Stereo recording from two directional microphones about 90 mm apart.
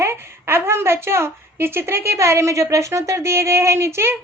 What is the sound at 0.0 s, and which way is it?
A woman's voice, 25° right (ahead or behind).